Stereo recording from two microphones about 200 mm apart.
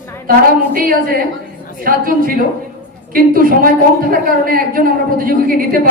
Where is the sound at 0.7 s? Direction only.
45° right (ahead or behind).